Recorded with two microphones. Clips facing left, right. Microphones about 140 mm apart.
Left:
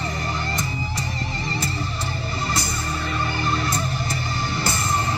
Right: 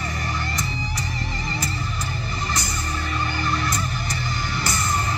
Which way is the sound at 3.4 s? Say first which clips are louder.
Left 1 dB; 25° left (ahead or behind).